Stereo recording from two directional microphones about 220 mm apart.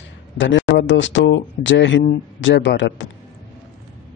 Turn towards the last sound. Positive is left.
turn(degrees=55)  # may be behind; listen again after turning